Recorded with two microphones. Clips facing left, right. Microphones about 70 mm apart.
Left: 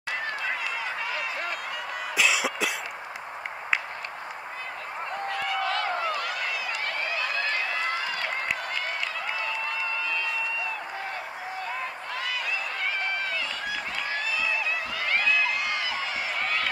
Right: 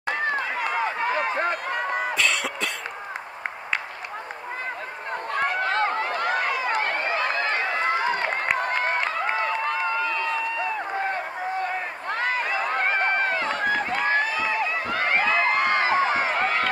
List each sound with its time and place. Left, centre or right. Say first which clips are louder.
0.1 s run: right 5 dB; right
2.1 s cough: even; centre
5.3 s run: right 5 dB; right